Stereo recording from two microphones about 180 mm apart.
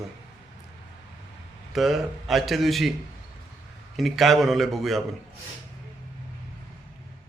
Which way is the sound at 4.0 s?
Centre (ahead or behind).